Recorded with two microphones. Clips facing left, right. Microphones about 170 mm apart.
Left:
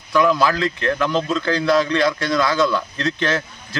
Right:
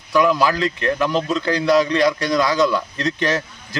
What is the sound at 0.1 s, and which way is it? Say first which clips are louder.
A man's voice: even; 15° right (ahead or behind).